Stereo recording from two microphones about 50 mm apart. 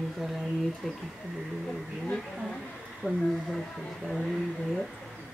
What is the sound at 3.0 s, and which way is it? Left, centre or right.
Speech, right.